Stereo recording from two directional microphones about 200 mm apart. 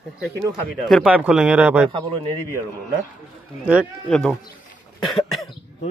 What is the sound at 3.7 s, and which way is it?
Speech, 5° right (ahead or behind).